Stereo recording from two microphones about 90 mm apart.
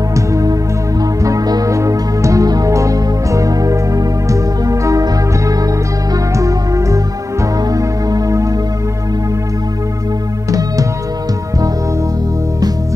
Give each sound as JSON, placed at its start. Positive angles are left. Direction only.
{"t": 0.1, "sound": "music", "side_deg": -35}
{"t": 6.3, "sound": "music", "side_deg": -40}